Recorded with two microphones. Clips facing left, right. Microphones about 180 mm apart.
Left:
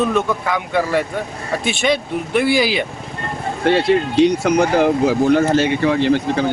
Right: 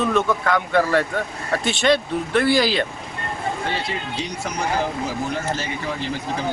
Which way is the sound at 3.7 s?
70° left (ahead or behind).